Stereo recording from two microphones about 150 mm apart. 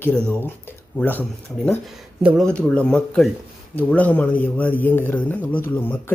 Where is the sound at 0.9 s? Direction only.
10° left (ahead or behind).